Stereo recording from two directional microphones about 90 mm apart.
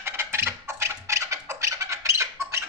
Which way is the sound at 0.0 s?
30° right (ahead or behind).